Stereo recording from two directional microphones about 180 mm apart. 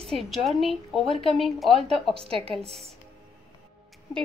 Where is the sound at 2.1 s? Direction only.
30° right (ahead or behind).